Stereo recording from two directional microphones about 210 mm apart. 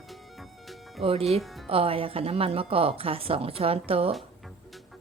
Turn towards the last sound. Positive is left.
turn(degrees=-25)  # may be behind; listen again after turning